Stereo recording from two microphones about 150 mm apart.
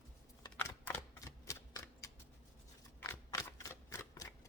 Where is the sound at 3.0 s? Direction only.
20° left (ahead or behind).